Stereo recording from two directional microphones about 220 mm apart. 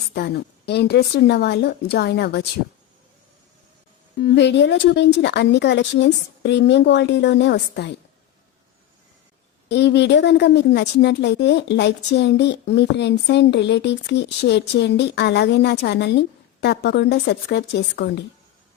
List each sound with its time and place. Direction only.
0.1 s a woman's voice: 50° left (ahead or behind)
4.2 s a woman's voice: 50° left (ahead or behind)
9.6 s a woman's voice: 50° left (ahead or behind)